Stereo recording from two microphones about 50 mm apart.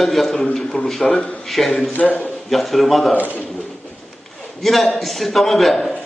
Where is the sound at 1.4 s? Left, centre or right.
Centre.